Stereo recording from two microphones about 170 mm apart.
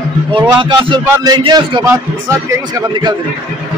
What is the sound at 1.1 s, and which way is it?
Speech, 15° right (ahead or behind).